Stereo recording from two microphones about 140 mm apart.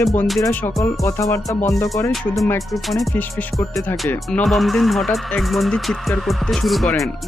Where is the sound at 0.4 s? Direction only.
15° left (ahead or behind).